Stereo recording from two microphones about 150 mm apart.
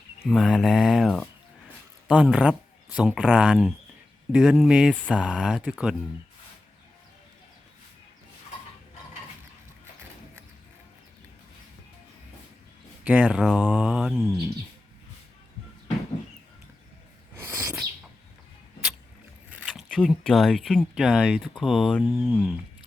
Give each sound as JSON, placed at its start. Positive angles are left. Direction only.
{"t": 0.2, "sound": "speech", "side_deg": 0}
{"t": 13.1, "sound": "speech", "side_deg": -10}
{"t": 17.3, "sound": "sneeze", "side_deg": -20}
{"t": 19.5, "sound": "speech", "side_deg": -5}